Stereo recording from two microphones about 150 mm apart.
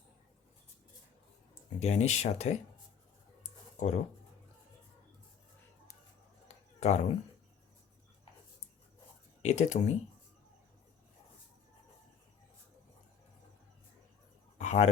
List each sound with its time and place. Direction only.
1.8 s speech: 50° left (ahead or behind)
3.8 s speech: 55° left (ahead or behind)
6.7 s speech: 45° left (ahead or behind)
9.4 s speech: 50° left (ahead or behind)
14.6 s a sound: 50° left (ahead or behind)